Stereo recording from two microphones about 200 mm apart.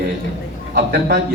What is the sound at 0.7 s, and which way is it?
Speech, 55° right (ahead or behind).